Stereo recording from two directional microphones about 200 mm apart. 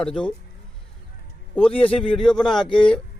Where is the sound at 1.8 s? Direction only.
5° left (ahead or behind).